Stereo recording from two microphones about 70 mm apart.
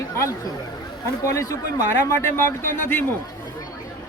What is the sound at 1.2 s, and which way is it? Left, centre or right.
Speech, left.